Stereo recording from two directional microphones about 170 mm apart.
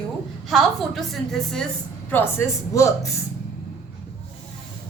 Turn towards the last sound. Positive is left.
turn(degrees=20)  # may be behind; listen again after turning